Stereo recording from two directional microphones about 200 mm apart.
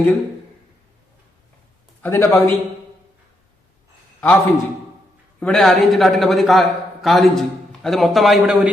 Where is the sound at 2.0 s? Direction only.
15° left (ahead or behind).